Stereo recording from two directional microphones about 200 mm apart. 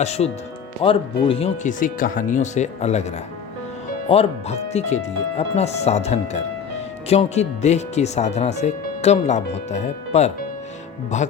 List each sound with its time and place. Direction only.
0.0 s speech: 30° left (ahead or behind)
4.1 s speech: 30° left (ahead or behind)